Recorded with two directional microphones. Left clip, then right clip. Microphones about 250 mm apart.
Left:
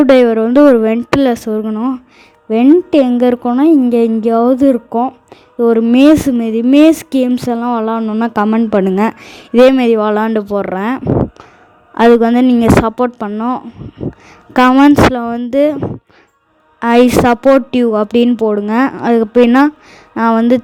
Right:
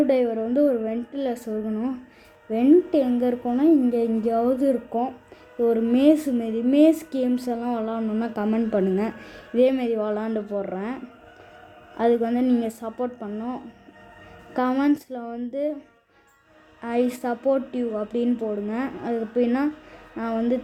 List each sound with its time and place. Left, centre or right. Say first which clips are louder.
0.1 s a woman's voice: left 14 dB; left
16.8 s a woman's voice: left 16 dB; left